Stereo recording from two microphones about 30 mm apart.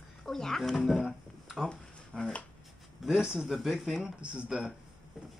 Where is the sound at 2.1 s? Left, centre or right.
Left.